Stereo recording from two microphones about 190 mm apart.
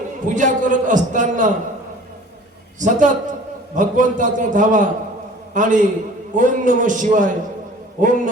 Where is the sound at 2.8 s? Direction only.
40° right (ahead or behind).